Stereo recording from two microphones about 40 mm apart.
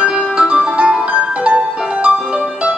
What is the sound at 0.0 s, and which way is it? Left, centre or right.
Music, right.